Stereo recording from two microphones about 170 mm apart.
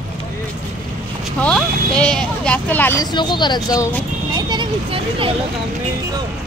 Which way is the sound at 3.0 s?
25° left (ahead or behind).